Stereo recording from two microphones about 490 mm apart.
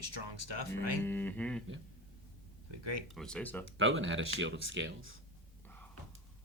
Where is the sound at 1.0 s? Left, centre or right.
Centre.